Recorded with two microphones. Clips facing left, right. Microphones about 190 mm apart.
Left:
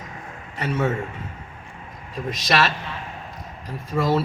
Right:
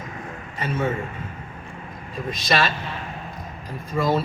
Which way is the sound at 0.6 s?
75° left (ahead or behind).